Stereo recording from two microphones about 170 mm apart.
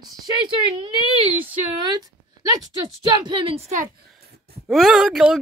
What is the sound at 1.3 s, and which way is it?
Speech, 10° right (ahead or behind).